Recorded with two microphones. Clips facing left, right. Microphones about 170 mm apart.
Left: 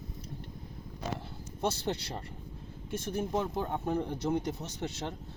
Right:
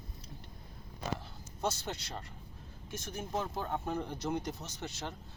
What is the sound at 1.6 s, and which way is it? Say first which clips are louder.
Speech: left 4 dB; 30° left (ahead or behind).